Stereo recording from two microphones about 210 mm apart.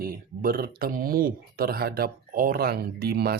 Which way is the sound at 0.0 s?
45° right (ahead or behind).